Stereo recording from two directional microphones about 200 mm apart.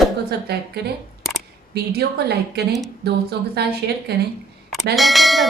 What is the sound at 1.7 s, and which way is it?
A woman's voice, 55° right (ahead or behind).